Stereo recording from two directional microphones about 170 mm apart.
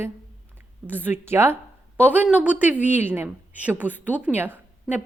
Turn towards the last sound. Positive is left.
turn(degrees=-10)  # may be behind; listen again after turning